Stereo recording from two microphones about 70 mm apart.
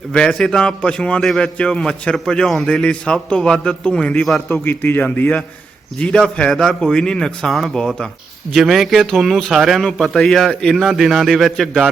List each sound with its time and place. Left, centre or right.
0.1 s a man's voice: centre
4.6 s speech: left
6.0 s a man's voice: centre
10.8 s a man's voice: centre